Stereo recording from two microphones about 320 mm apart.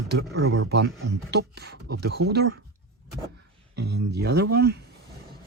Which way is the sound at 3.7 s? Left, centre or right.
Right.